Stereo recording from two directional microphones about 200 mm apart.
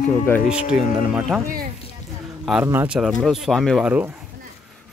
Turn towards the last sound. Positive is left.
turn(degrees=-5)  # may be behind; listen again after turning